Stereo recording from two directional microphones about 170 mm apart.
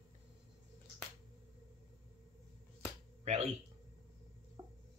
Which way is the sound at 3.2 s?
40° right (ahead or behind).